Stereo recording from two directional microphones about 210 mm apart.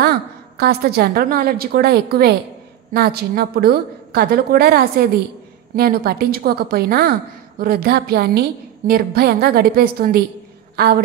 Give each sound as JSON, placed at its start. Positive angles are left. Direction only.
{"t": 0.0, "sound": "a woman's voice", "side_deg": -50}